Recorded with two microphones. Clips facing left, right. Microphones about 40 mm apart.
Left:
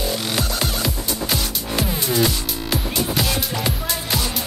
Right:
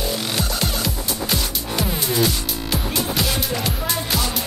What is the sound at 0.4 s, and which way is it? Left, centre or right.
Music, centre.